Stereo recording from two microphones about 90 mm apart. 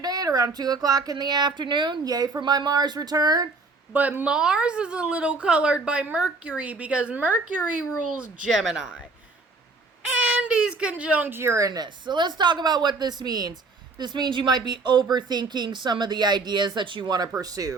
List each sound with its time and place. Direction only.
0.0 s speech: 45° right (ahead or behind)
3.9 s a woman's voice: 20° right (ahead or behind)
10.2 s speech: 10° right (ahead or behind); by 17.7 s 40° right (ahead or behind)